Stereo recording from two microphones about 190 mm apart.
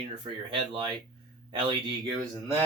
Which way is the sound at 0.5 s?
25° right (ahead or behind).